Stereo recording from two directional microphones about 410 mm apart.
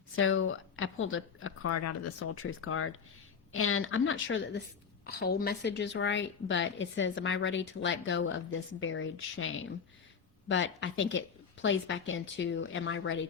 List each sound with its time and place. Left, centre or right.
0.2 s a woman's voice: left